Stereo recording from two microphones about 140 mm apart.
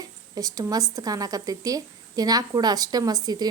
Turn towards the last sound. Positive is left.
turn(degrees=-30)  # may be behind; listen again after turning